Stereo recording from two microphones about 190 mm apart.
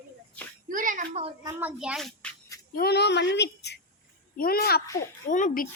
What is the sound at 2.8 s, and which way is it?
A woman's voice, 60° left (ahead or behind).